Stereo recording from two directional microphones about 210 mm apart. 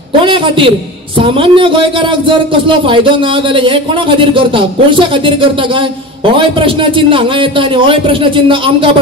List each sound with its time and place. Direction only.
0.2 s a man's voice: 25° right (ahead or behind)